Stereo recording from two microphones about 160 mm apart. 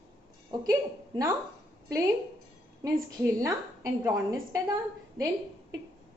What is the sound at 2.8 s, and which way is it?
A woman's voice, 20° right (ahead or behind).